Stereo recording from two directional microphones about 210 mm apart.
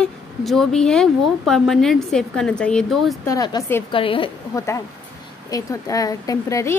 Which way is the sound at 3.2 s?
15° left (ahead or behind).